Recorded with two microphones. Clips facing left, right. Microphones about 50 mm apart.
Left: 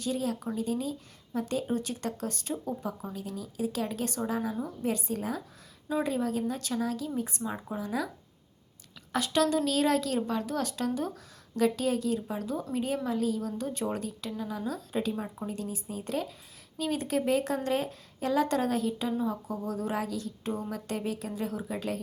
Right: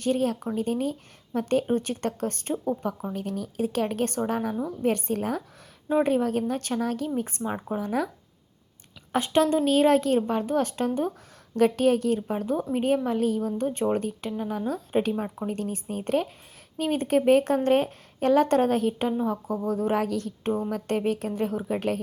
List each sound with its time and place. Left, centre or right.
0.0 s speech: right
9.1 s speech: right